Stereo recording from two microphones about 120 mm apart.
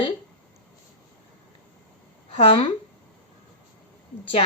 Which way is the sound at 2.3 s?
50° left (ahead or behind).